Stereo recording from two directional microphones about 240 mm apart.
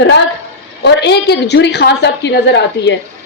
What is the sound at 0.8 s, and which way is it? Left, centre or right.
A woman's voice, left.